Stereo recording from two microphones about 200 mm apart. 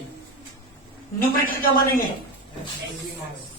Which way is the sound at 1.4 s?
45° left (ahead or behind).